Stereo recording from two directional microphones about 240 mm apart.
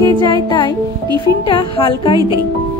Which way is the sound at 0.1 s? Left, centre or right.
Centre.